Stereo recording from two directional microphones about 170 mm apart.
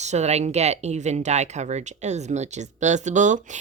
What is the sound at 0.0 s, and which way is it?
Speech, 40° right (ahead or behind).